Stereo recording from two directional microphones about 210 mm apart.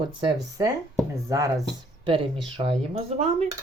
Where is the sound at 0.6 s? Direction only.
15° right (ahead or behind).